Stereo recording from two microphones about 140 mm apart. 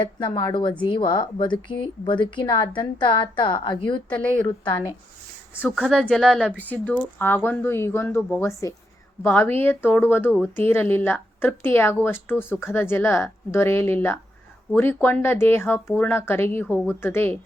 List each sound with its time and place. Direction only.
0.2 s a woman's voice: 30° left (ahead or behind)
5.6 s a woman's voice: centre (ahead or behind); by 17.4 s 15° left (ahead or behind)